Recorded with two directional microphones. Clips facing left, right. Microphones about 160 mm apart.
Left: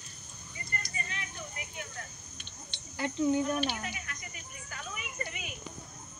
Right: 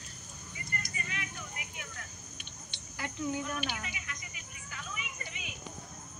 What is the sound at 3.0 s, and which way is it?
Speech, 25° left (ahead or behind).